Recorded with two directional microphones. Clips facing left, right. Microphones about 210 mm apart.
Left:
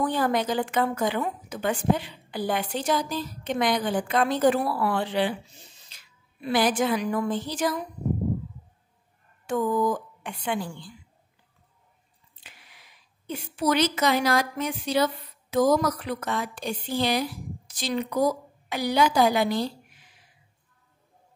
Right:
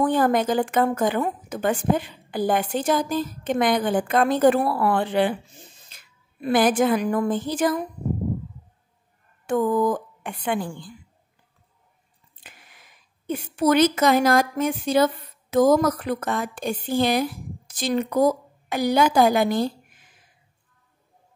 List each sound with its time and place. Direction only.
0.0 s a woman's voice: 50° right (ahead or behind)
9.5 s a woman's voice: 55° right (ahead or behind)
12.4 s a woman's voice: 50° right (ahead or behind)